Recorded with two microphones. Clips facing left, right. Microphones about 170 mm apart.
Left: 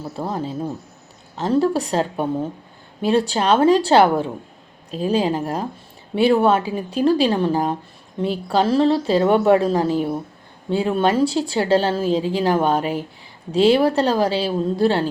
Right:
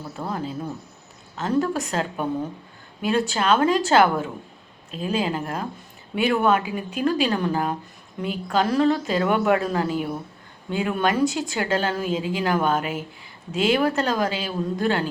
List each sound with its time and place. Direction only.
0.2 s speech: 30° left (ahead or behind)